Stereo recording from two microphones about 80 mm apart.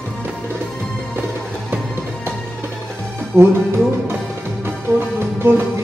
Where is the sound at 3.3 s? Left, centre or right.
Right.